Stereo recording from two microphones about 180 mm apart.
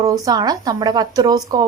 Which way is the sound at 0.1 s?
20° right (ahead or behind).